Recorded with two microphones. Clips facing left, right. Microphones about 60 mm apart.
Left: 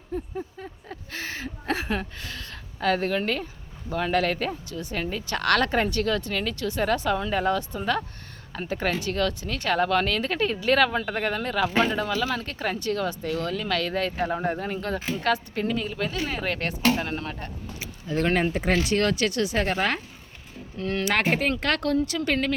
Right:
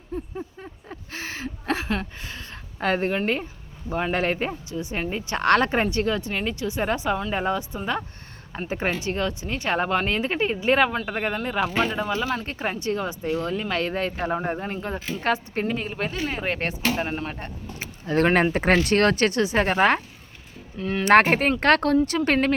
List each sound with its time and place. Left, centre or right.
0.3 s a sound: centre
1.1 s a sound: right
2.1 s speech: right
17.7 s speech: right
19.4 s speech: right
20.7 s speech: centre
21.0 s speech: right